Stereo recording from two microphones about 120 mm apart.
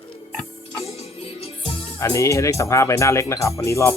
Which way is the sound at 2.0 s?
25° left (ahead or behind).